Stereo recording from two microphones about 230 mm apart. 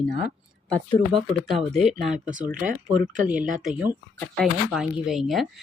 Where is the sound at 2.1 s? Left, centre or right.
Right.